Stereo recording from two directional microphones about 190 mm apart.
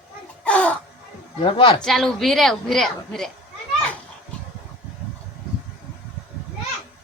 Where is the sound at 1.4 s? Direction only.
25° left (ahead or behind).